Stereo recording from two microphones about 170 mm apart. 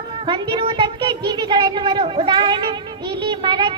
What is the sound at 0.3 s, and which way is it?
A man's voice, 25° right (ahead or behind).